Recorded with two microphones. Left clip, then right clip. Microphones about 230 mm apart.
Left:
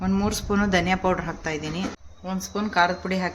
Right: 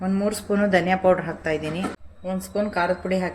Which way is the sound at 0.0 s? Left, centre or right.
Centre.